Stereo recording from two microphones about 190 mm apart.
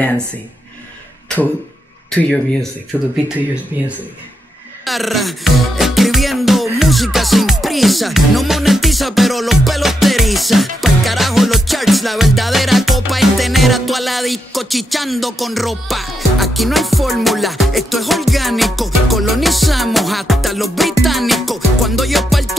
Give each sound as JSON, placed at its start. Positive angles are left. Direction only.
{"t": 4.8, "sound": "music", "side_deg": 0}